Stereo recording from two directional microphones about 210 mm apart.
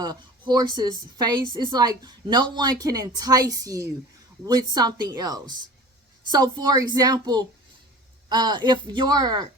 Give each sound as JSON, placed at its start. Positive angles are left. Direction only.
{"t": 0.0, "sound": "a woman's voice", "side_deg": -20}